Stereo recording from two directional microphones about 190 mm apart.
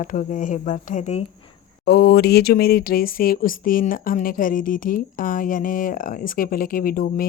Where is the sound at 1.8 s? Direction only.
60° left (ahead or behind).